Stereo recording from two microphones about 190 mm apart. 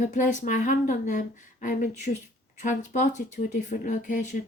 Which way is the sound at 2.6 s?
40° left (ahead or behind).